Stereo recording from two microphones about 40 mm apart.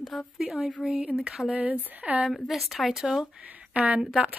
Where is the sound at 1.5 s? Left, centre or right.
Right.